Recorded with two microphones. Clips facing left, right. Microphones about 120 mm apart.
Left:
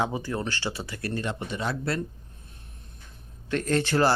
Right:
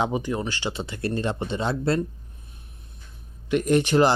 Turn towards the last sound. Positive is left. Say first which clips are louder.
# right 4 dB
turn(degrees=-15)  # may be behind; listen again after turning